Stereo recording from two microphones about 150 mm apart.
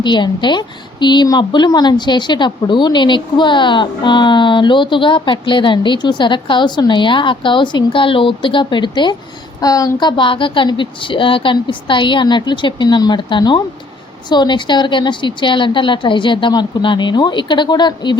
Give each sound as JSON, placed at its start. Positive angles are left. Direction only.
{"t": 0.0, "sound": "a woman's voice", "side_deg": 30}